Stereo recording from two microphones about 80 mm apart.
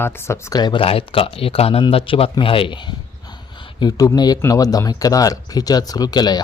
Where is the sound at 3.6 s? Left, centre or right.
Left.